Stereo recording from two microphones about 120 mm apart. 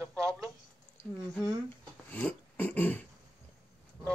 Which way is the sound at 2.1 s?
10° left (ahead or behind).